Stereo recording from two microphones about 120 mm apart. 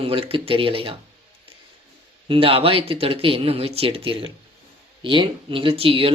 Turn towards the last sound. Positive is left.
turn(degrees=-50)  # may be behind; listen again after turning